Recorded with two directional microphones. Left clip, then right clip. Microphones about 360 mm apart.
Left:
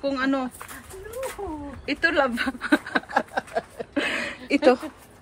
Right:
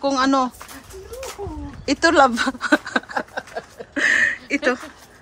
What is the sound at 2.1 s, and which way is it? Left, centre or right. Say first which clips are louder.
Speech: right 8 dB; centre.